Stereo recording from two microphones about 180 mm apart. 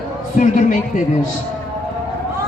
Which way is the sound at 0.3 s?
45° left (ahead or behind).